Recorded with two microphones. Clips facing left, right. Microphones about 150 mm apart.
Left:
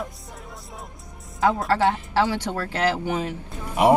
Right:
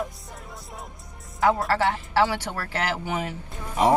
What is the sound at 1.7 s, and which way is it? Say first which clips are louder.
A woman's voice: left 3 dB; 20° left (ahead or behind).